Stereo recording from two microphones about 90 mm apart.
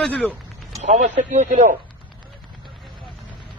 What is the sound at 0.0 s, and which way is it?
Speech, 15° left (ahead or behind).